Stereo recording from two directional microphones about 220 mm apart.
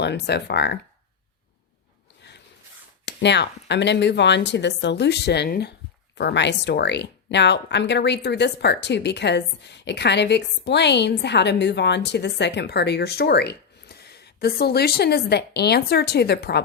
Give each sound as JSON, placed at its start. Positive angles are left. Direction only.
{"t": 0.0, "sound": "speech", "side_deg": 50}
{"t": 2.3, "sound": "a sound", "side_deg": 50}
{"t": 3.1, "sound": "speech", "side_deg": 50}